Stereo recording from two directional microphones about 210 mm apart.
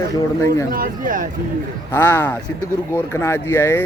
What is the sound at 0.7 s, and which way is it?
Speech, 40° right (ahead or behind).